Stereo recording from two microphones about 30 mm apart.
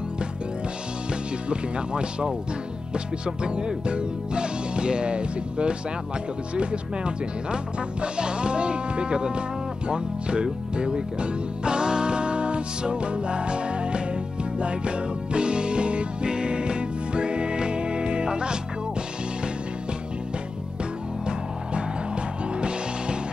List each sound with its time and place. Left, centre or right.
1.5 s speech: right
9.8 s music: right